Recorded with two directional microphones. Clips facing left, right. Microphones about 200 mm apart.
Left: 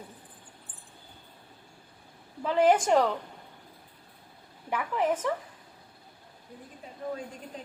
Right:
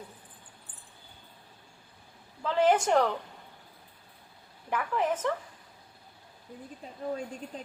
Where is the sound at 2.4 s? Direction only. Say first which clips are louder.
Left 2 dB; 15° left (ahead or behind).